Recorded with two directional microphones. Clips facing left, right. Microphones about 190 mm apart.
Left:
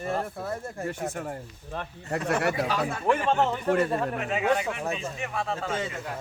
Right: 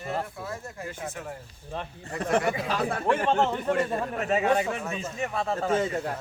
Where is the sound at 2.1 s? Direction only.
70° left (ahead or behind).